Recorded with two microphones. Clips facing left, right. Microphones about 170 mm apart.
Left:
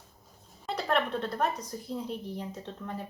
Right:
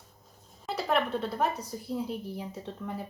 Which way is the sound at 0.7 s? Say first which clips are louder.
Right 1 dB; 5° right (ahead or behind).